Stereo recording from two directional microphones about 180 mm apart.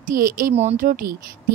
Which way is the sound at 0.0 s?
50° right (ahead or behind).